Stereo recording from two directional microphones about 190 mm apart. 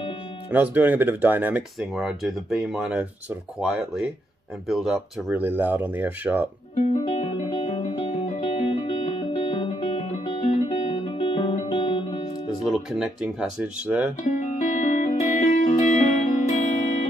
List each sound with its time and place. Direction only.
0.5 s speech: 10° right (ahead or behind)
6.7 s music: 35° left (ahead or behind)
12.6 s speech: 5° right (ahead or behind)
14.3 s music: 45° left (ahead or behind)